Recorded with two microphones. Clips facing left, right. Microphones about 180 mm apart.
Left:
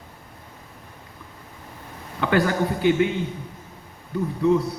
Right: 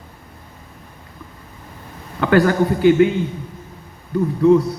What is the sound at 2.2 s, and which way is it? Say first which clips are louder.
Speech: right 6 dB; 55° right (ahead or behind).